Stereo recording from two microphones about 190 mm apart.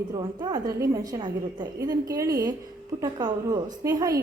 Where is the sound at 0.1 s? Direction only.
20° right (ahead or behind).